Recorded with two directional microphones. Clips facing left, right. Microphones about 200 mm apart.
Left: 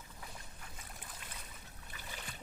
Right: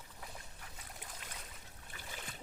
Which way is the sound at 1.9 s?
50° right (ahead or behind).